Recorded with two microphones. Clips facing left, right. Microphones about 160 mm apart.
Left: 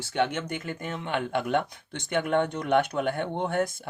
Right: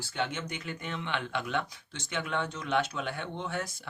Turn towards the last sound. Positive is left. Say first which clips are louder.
# left 8 dB
turn(degrees=55)  # may be behind; listen again after turning